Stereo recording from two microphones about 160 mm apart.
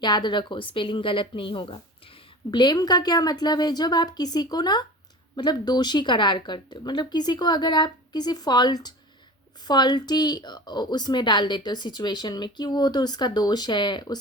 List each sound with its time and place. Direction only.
0.0 s a woman's voice: 30° left (ahead or behind)